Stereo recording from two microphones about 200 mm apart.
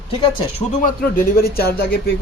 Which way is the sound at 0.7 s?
45° left (ahead or behind).